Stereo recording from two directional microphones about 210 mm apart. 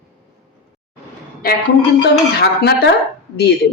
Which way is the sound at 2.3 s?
50° left (ahead or behind).